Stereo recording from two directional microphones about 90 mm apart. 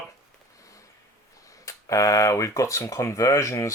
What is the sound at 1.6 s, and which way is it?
Speech, 40° left (ahead or behind).